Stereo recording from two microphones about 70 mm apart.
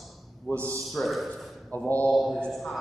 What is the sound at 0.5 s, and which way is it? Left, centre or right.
Speech, right.